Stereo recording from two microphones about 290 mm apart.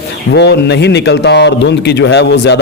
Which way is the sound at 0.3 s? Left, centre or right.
Left.